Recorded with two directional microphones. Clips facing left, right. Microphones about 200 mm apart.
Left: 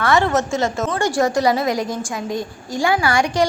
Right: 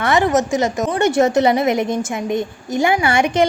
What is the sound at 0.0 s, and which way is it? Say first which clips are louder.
A woman's voice: right 2 dB; 20° right (ahead or behind).